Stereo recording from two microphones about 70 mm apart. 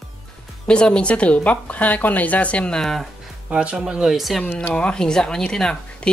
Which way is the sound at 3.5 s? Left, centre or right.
Centre.